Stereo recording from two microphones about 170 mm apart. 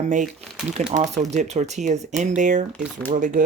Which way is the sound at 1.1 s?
40° right (ahead or behind).